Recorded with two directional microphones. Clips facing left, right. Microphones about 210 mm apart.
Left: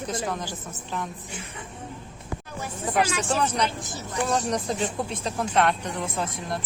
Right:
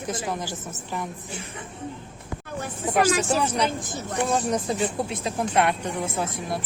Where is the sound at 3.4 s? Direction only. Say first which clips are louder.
Right 1 dB; 10° right (ahead or behind).